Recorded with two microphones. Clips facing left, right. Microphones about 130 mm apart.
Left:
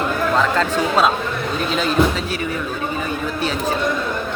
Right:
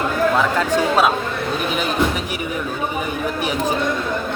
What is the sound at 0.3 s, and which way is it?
Speech, 10° right (ahead or behind).